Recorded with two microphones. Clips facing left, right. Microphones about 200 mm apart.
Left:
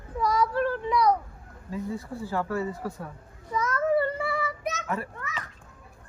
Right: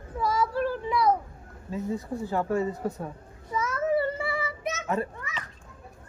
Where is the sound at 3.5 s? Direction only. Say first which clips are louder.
Left 1 dB; 10° right (ahead or behind).